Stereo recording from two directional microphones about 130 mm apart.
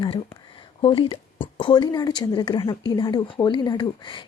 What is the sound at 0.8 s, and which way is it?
A woman's voice, 45° left (ahead or behind).